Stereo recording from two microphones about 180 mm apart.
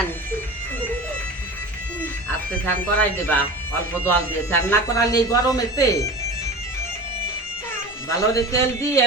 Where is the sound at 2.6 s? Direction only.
10° left (ahead or behind).